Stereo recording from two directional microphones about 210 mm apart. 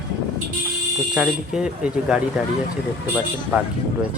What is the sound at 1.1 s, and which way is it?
Speech, 5° right (ahead or behind).